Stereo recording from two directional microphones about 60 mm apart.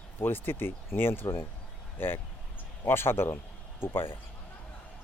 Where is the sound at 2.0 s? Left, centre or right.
Left.